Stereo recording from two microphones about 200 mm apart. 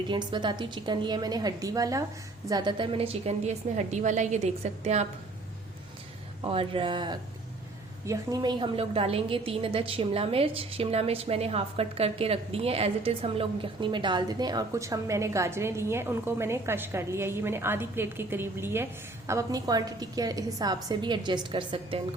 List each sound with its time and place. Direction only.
0.1 s a woman's voice: 25° right (ahead or behind)
6.4 s a woman's voice: 25° right (ahead or behind)